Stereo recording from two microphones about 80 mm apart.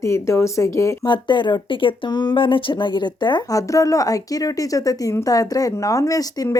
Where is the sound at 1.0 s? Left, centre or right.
Left.